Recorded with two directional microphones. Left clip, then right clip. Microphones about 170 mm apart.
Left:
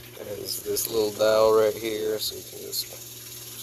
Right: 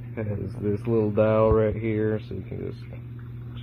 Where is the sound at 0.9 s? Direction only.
20° left (ahead or behind).